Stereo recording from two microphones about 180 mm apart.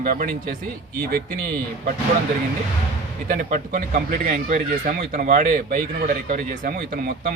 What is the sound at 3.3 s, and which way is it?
A man's voice, 50° right (ahead or behind).